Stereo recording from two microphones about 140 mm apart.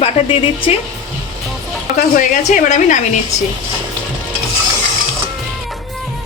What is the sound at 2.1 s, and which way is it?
Speech, 70° left (ahead or behind).